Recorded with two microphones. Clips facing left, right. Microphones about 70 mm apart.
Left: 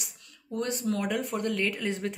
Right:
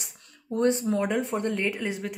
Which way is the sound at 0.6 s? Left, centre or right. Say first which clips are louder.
Right 6 dB; right.